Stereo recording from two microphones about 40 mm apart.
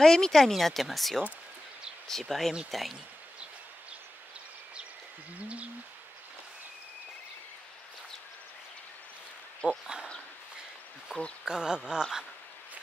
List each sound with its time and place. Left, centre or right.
0.0 s speech: centre
5.4 s bird: right
9.7 s speech: centre
11.1 s speech: centre